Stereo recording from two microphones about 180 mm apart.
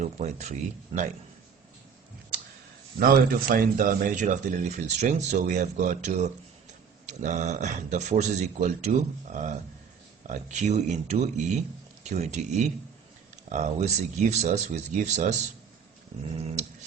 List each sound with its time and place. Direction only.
0.0 s speech: 40° right (ahead or behind)
3.0 s speech: 50° right (ahead or behind)